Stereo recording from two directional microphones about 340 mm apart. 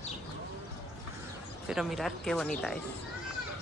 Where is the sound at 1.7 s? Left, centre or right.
Centre.